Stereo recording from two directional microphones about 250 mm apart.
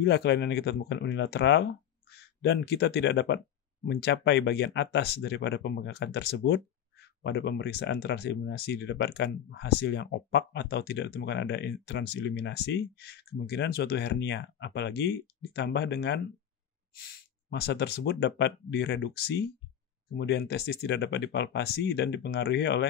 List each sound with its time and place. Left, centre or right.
0.0 s speech: left